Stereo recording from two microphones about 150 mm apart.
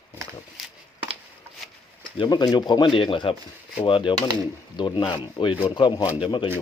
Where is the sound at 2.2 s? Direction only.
30° left (ahead or behind).